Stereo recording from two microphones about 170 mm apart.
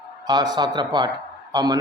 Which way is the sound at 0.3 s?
25° right (ahead or behind).